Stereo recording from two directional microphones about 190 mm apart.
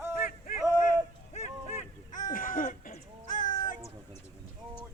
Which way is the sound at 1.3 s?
35° left (ahead or behind).